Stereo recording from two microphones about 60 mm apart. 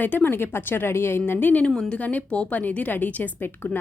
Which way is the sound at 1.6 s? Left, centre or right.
Centre.